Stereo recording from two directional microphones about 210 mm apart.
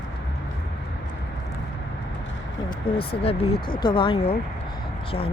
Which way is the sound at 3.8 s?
25° left (ahead or behind).